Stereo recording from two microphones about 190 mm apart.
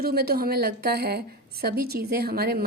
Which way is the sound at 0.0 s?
55° right (ahead or behind).